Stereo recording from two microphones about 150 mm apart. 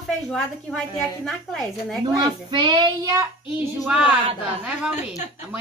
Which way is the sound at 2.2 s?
30° right (ahead or behind).